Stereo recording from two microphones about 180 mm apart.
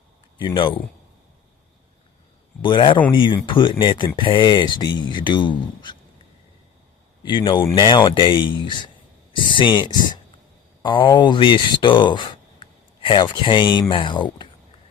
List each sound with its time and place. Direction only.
0.3 s speech: 25° left (ahead or behind)
2.6 s a man's voice: 25° left (ahead or behind)
7.3 s speech: 25° left (ahead or behind)